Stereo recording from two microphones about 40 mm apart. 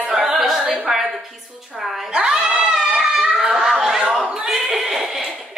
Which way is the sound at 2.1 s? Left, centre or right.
Right.